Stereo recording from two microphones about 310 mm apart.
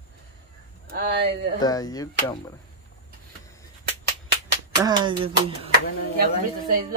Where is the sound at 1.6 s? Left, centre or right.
Centre.